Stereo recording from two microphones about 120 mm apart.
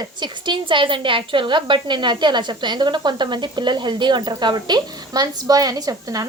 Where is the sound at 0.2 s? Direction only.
40° right (ahead or behind).